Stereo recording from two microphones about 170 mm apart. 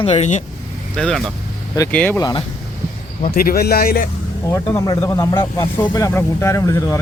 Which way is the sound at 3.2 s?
60° left (ahead or behind).